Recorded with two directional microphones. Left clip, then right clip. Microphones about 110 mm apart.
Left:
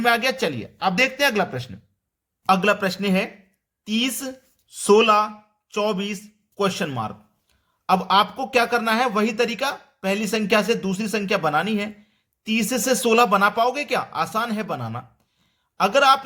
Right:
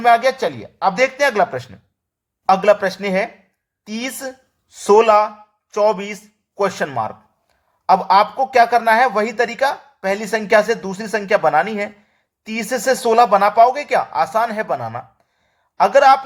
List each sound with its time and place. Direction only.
0.0 s speech: 35° left (ahead or behind)